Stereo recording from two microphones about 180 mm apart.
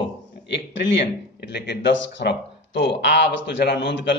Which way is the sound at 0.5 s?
75° left (ahead or behind).